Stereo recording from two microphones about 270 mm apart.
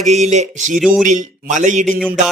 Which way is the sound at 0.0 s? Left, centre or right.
Right.